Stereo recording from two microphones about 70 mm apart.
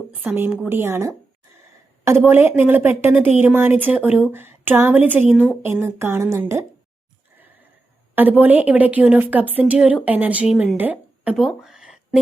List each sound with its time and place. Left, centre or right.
0.1 s a woman's voice: right
5.6 s a woman's voice: right
8.1 s a woman's voice: right
11.3 s a sound: centre